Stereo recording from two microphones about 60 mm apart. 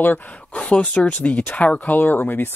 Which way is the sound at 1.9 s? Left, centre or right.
Left.